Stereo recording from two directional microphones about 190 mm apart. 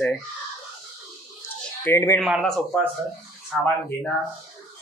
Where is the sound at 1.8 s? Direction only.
10° left (ahead or behind).